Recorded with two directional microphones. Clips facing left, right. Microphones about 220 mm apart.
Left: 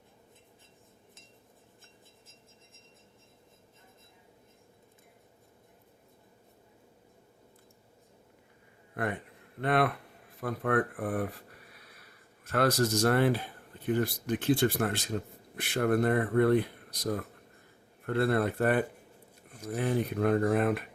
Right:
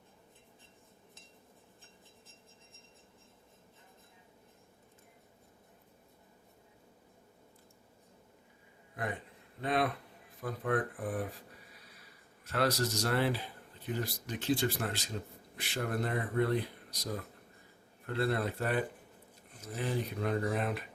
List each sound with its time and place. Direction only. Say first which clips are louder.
9.0 s a man's voice: left 5 dB; 60° left (ahead or behind)
12.5 s speech: left 5 dB; 50° left (ahead or behind)